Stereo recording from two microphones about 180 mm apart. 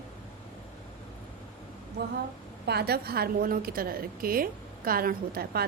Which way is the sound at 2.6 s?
60° right (ahead or behind).